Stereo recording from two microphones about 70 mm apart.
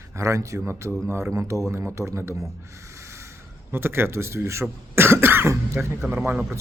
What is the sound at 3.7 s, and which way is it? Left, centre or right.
A man's voice, right.